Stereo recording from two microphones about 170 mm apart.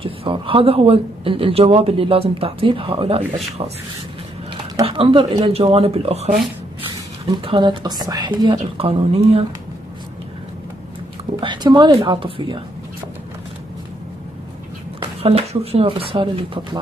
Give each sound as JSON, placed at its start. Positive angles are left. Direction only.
{"t": 0.0, "sound": "speech", "side_deg": -30}
{"t": 4.8, "sound": "a woman's voice", "side_deg": -30}
{"t": 11.3, "sound": "a woman's voice", "side_deg": -25}
{"t": 15.0, "sound": "speech", "side_deg": -35}